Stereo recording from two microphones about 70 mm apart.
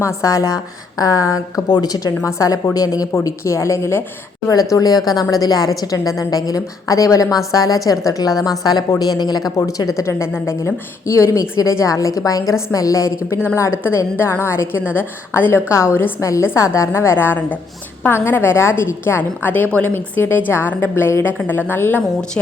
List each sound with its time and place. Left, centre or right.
0.0 s a woman's voice: left
1.7 s a woman's voice: left
3.2 s a woman's voice: left
4.7 s a woman's voice: left
9.6 s a woman's voice: left
10.0 s a woman's voice: left
16.2 s a woman's voice: left